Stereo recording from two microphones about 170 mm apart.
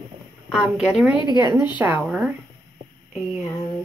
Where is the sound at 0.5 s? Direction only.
5° right (ahead or behind).